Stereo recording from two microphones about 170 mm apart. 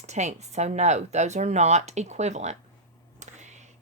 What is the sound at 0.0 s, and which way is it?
Speech, 40° right (ahead or behind).